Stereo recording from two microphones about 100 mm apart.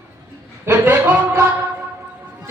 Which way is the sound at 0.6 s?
20° right (ahead or behind).